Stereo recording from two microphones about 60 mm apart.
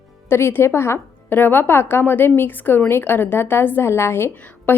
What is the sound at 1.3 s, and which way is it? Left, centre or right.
A woman's voice, left.